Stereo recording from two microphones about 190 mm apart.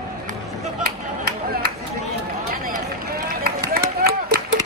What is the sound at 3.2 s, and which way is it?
Run, 50° right (ahead or behind).